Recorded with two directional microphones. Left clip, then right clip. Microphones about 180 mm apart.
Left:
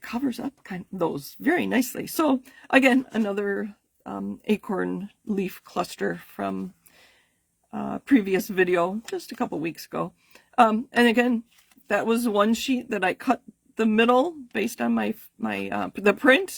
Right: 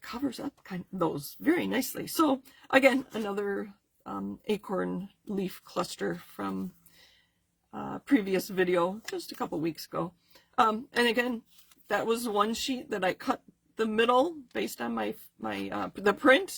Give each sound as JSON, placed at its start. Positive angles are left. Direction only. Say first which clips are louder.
{"t": 0.0, "sound": "speech", "louder": "left 5 dB", "side_deg": 45}